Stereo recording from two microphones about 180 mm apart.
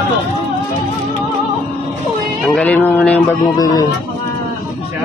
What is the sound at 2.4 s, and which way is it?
Music, 5° left (ahead or behind).